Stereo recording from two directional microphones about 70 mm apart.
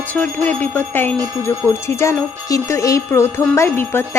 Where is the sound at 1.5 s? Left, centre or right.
Left.